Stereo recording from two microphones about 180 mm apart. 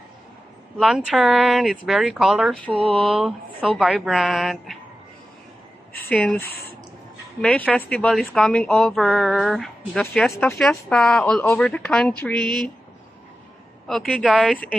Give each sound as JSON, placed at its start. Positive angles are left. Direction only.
{"t": 0.7, "sound": "a woman's voice", "side_deg": 0}
{"t": 2.8, "sound": "a sound", "side_deg": -30}
{"t": 3.2, "sound": "a woman's voice", "side_deg": 0}
{"t": 6.4, "sound": "speech", "side_deg": 60}
{"t": 7.4, "sound": "a woman's voice", "side_deg": 5}
{"t": 13.8, "sound": "a woman's voice", "side_deg": 0}